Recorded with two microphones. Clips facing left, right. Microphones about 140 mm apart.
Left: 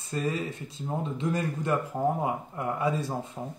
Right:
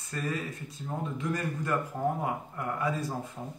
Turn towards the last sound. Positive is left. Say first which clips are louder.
# left 3 dB
turn(degrees=25)  # may be behind; listen again after turning